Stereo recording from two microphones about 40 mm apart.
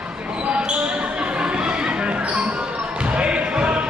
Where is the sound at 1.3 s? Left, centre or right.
Right.